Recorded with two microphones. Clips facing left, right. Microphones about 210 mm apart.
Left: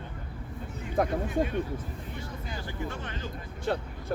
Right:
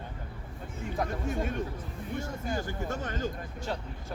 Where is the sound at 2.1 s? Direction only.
45° right (ahead or behind).